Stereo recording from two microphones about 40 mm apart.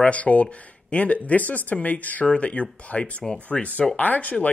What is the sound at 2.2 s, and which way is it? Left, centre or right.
Speech, left.